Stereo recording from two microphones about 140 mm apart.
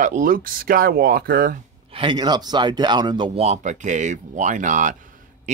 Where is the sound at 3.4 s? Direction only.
55° right (ahead or behind).